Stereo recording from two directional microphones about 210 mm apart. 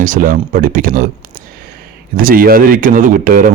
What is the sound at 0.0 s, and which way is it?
Speech, 40° right (ahead or behind).